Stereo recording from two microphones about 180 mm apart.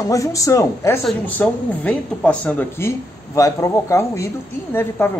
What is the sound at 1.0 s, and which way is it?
A woman's voice, 5° left (ahead or behind).